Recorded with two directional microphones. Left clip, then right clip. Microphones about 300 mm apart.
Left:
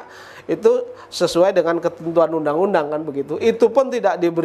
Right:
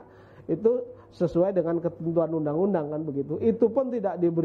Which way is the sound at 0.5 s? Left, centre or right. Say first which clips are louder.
Left 8 dB; centre.